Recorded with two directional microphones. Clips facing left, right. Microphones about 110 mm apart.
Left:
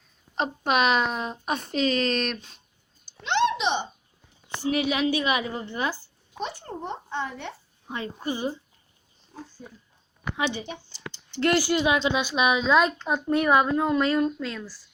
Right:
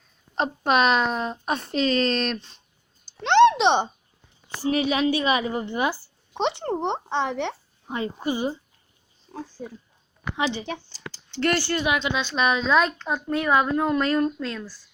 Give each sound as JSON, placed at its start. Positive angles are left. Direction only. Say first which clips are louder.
{"t": 0.3, "sound": "speech", "louder": "right 3 dB", "side_deg": 5}
{"t": 3.1, "sound": "a sound", "louder": "right 8 dB", "side_deg": -80}
{"t": 4.4, "sound": "speech", "louder": "right 2 dB", "side_deg": 0}
{"t": 5.5, "sound": "a woman's voice", "louder": "right 4 dB", "side_deg": -15}
{"t": 6.4, "sound": "speech", "louder": "right 9 dB", "side_deg": -85}
{"t": 7.9, "sound": "a woman's voice", "louder": "right 4 dB", "side_deg": -15}
{"t": 9.3, "sound": "pig", "louder": "right 6 dB", "side_deg": -55}
{"t": 11.3, "sound": "a woman's voice", "louder": "left 1 dB", "side_deg": 15}
{"t": 11.9, "sound": "a woman's voice", "louder": "left 2 dB", "side_deg": 25}
{"t": 12.2, "sound": "a woman's voice", "louder": "even", "side_deg": 10}
{"t": 14.3, "sound": "speech", "louder": "right 1 dB", "side_deg": 0}